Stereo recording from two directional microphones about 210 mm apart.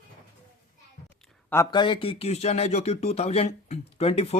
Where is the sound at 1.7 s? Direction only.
20° left (ahead or behind).